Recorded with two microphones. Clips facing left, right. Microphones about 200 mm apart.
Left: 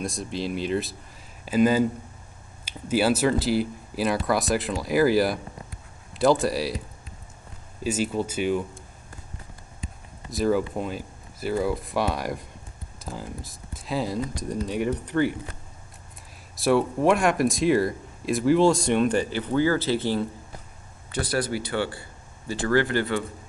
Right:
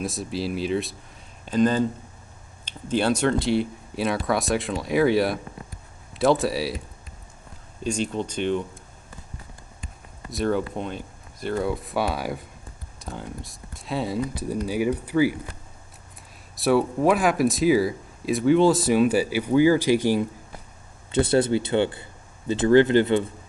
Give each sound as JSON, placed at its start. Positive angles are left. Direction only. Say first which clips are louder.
{"t": 0.0, "sound": "speech", "louder": "right 1 dB", "side_deg": -5}
{"t": 7.8, "sound": "speech", "louder": "left 1 dB", "side_deg": 5}
{"t": 10.3, "sound": "speech", "louder": "left 1 dB", "side_deg": 5}
{"t": 16.5, "sound": "speech", "louder": "right 1 dB", "side_deg": 0}
{"t": 21.1, "sound": "speech", "louder": "right 7 dB", "side_deg": -25}